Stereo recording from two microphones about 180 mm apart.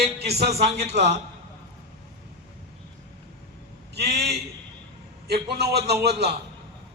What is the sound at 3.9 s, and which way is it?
A man's voice, 65° right (ahead or behind).